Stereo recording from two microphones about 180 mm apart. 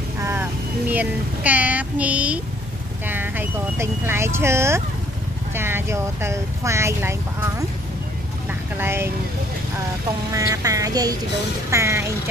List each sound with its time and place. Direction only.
0.2 s speech: 10° right (ahead or behind)
8.7 s speech: 15° right (ahead or behind)
10.3 s speech: 20° right (ahead or behind)